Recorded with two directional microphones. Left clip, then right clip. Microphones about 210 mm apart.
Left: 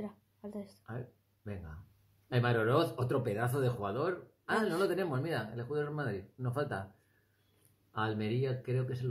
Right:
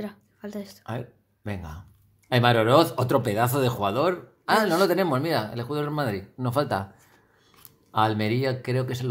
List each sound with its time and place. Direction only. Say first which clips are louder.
0.0 s speech: right 9 dB; 5° right (ahead or behind)
2.2 s speech: right 11 dB; 30° right (ahead or behind)
7.9 s speech: right 12 dB; 25° right (ahead or behind)